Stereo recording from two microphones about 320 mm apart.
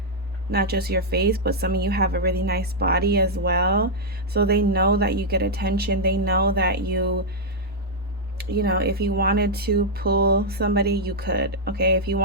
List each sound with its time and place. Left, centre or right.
0.5 s speech: right
8.4 s speech: right